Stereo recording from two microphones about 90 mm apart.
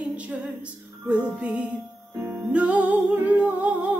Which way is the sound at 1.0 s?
15° right (ahead or behind).